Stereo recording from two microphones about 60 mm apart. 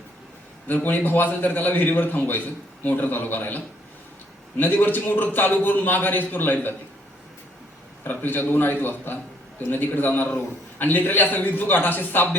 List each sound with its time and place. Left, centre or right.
0.7 s a man's voice: left
8.0 s a man's voice: left